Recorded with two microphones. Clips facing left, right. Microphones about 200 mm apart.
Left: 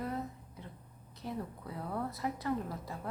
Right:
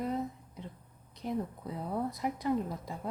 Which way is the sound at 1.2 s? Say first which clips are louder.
Right 5 dB; 20° right (ahead or behind).